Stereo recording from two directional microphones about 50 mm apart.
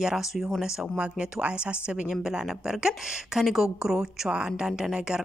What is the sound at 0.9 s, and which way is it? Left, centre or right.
Speech, right.